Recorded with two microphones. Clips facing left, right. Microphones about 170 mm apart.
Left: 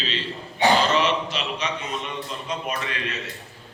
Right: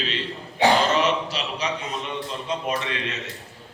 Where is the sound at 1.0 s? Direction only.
40° right (ahead or behind).